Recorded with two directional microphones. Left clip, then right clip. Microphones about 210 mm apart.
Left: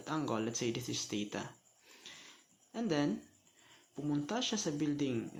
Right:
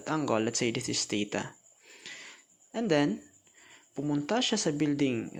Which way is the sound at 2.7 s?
30° right (ahead or behind).